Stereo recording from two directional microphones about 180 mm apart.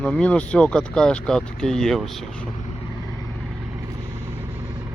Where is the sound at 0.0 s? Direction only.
5° left (ahead or behind).